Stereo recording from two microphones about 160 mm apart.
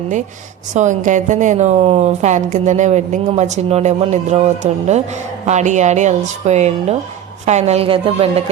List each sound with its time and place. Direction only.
0.7 s a woman's voice: 50° right (ahead or behind)